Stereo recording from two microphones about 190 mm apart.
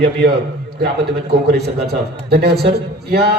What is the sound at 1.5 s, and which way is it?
A man's voice, 55° right (ahead or behind).